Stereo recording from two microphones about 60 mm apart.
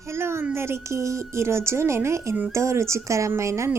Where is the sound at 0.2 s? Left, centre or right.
Right.